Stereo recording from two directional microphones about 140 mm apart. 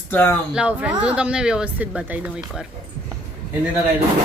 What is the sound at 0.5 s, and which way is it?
Speech, 10° right (ahead or behind).